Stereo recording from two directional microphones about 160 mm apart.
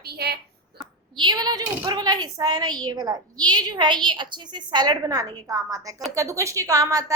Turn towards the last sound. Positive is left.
turn(degrees=-20)  # may be behind; listen again after turning